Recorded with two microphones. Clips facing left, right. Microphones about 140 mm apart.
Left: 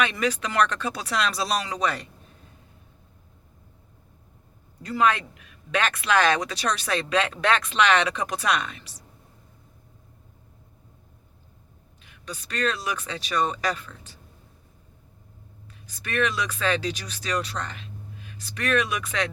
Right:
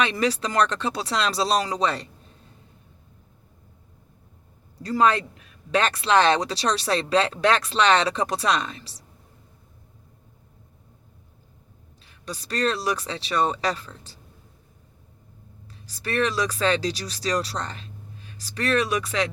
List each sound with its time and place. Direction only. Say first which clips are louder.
0.0 s speech: right 2 dB; 30° right (ahead or behind)
4.8 s speech: right 2 dB; 35° right (ahead or behind)
12.1 s speech: right 3 dB; 35° right (ahead or behind)
15.6 s speech: right 6 dB; 35° right (ahead or behind)